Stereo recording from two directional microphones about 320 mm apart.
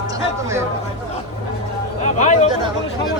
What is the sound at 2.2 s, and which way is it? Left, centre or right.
Speech, left.